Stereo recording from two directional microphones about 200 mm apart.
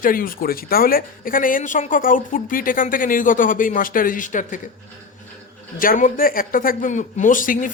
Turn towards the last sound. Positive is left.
turn(degrees=40)  # may be behind; listen again after turning